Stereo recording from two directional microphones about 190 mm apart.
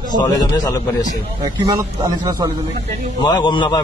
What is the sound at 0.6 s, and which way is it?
Speech, 20° left (ahead or behind).